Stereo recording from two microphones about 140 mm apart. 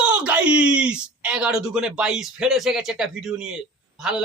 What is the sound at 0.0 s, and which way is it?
Speech, 10° right (ahead or behind).